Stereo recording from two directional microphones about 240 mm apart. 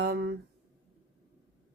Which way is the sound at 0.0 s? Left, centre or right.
Right.